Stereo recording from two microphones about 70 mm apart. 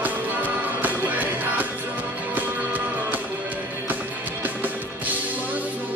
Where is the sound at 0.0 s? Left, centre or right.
Right.